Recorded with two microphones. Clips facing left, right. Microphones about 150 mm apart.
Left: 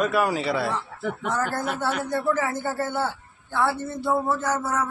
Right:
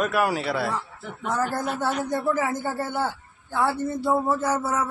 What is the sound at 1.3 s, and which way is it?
A man's voice, 15° right (ahead or behind).